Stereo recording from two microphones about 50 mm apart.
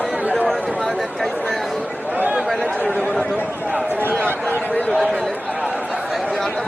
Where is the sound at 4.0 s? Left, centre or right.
Right.